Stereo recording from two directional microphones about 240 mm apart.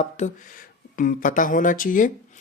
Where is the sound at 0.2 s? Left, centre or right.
Left.